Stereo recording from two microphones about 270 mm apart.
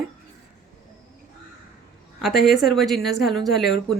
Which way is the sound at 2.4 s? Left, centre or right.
Centre.